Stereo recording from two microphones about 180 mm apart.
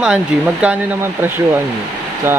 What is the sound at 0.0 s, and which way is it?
Speech, 5° right (ahead or behind).